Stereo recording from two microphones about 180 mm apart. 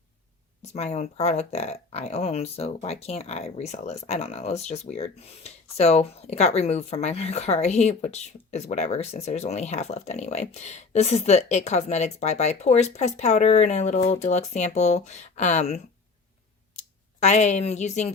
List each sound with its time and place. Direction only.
0.6 s speech: 40° left (ahead or behind)